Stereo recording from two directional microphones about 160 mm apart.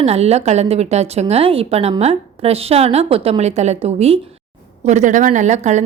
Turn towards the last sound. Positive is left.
turn(degrees=-45)  # may be behind; listen again after turning